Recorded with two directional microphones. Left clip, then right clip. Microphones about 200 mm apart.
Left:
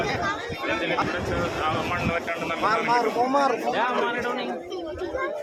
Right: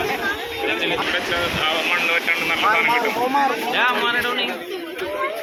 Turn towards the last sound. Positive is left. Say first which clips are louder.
# right 6 dB
turn(degrees=5)  # may be behind; listen again after turning